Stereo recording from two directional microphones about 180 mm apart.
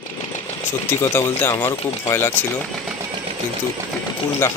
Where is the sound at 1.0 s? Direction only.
15° left (ahead or behind).